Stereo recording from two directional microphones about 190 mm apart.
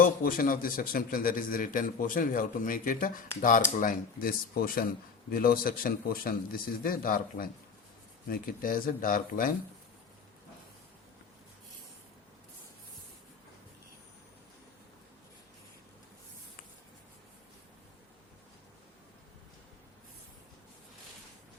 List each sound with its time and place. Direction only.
0.0 s a man's voice: 50° left (ahead or behind)